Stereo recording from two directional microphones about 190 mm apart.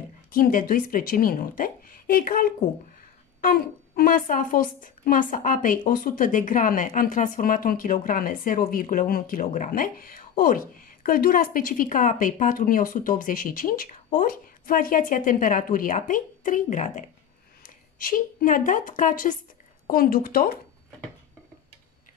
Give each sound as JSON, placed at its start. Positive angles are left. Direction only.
{"t": 0.3, "sound": "a woman's voice", "side_deg": 45}